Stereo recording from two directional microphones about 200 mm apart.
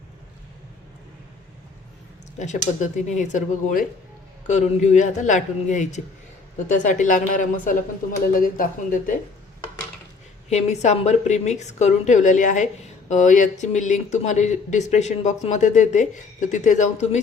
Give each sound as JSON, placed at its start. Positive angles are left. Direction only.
{"t": 2.4, "sound": "a woman's voice", "side_deg": 35}
{"t": 10.5, "sound": "a woman's voice", "side_deg": 35}